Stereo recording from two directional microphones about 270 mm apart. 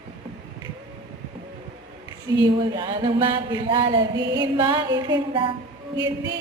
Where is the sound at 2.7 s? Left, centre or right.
Centre.